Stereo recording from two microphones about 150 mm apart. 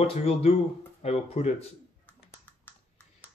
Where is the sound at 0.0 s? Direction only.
40° left (ahead or behind).